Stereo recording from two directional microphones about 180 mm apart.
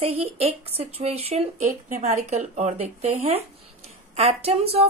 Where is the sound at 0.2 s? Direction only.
35° right (ahead or behind).